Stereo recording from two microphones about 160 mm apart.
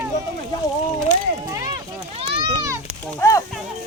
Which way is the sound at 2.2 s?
35° right (ahead or behind).